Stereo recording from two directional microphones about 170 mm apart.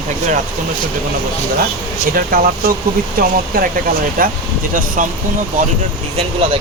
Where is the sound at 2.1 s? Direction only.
60° right (ahead or behind).